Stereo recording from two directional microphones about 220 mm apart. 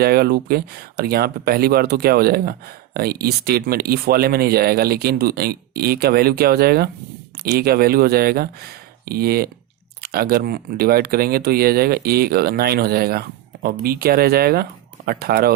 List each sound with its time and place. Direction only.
0.0 s speech: 45° right (ahead or behind)